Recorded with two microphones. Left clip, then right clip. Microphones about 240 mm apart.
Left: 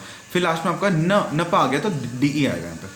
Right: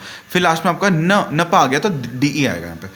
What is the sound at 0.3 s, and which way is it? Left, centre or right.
A man's voice, right.